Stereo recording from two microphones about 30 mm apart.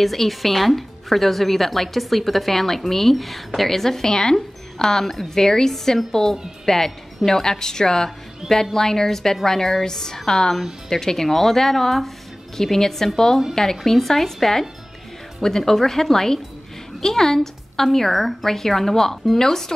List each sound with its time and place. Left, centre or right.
0.0 s a woman's voice: centre